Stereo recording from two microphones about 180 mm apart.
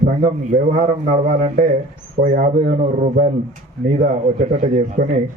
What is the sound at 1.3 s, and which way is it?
A man's voice, 45° right (ahead or behind).